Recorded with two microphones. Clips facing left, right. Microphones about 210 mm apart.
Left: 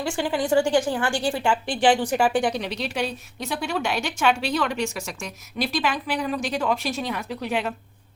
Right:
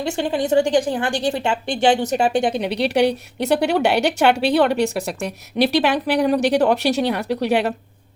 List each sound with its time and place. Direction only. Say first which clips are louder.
0.2 s speech: right 3 dB; 25° right (ahead or behind)
2.5 s speech: right 8 dB; 60° right (ahead or behind)